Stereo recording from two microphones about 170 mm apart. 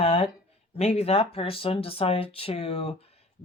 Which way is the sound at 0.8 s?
35° left (ahead or behind).